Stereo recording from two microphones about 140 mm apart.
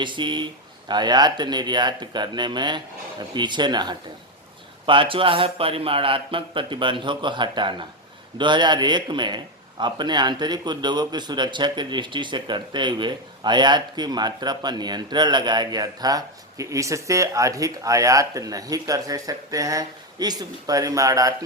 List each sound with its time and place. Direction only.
0.0 s a man's voice: 35° right (ahead or behind)